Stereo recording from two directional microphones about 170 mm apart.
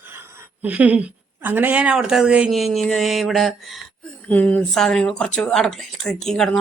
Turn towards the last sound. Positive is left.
turn(degrees=5)  # may be behind; listen again after turning